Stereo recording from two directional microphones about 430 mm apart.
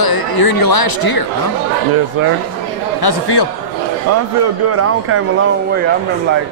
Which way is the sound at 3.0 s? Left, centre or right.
Left.